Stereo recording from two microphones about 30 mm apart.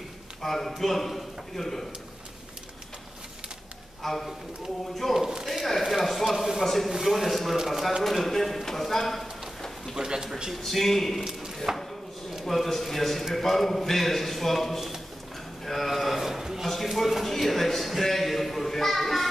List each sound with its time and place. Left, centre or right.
0.4 s a man's voice: centre
4.0 s a man's voice: centre
7.5 s speech: centre
8.0 s speech: centre
9.9 s speech: right
10.6 s a man's voice: centre
11.7 s speech: centre
12.4 s a man's voice: centre
15.6 s a sound: centre
15.9 s a sound: centre
16.6 s a man's voice: centre
18.0 s a sound: centre